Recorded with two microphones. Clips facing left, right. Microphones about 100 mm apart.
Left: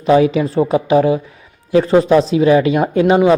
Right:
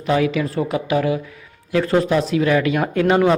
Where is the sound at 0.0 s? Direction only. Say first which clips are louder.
Left 7 dB; 25° left (ahead or behind).